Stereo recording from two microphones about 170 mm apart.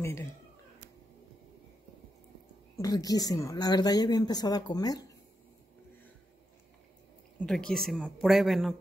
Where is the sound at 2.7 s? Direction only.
20° left (ahead or behind).